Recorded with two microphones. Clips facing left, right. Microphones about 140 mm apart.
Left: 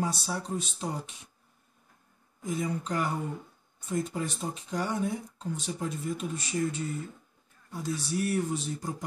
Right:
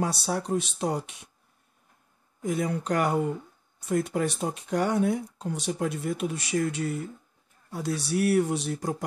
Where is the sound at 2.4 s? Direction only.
70° right (ahead or behind).